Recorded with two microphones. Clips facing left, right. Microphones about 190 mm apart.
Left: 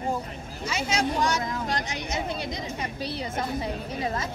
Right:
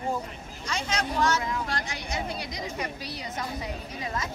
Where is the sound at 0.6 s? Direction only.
5° left (ahead or behind); by 4.3 s 30° left (ahead or behind).